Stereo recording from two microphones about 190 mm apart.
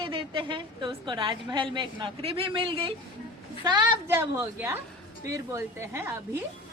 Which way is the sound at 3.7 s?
20° right (ahead or behind).